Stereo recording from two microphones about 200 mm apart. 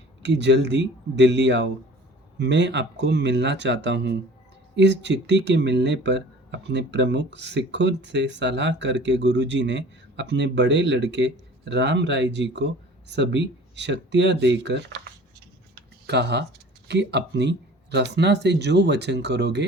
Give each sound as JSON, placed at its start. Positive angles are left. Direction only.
{"t": 0.2, "sound": "speech", "side_deg": -60}
{"t": 16.0, "sound": "speech", "side_deg": -55}